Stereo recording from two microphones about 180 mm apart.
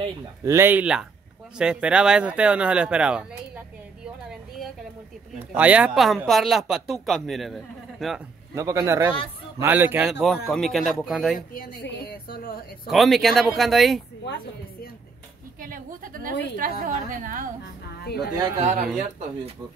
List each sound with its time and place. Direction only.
0.5 s speech: 10° right (ahead or behind)
8.5 s speech: 15° right (ahead or behind); by 11.3 s centre (ahead or behind)
11.3 s a woman's voice: 50° left (ahead or behind)
11.8 s speech: 65° left (ahead or behind)
12.8 s speech: centre (ahead or behind)
14.2 s a sound: 65° left (ahead or behind)
15.6 s a woman's voice: 50° right (ahead or behind)
18.0 s speech: 60° left (ahead or behind)
18.9 s speech: 40° right (ahead or behind)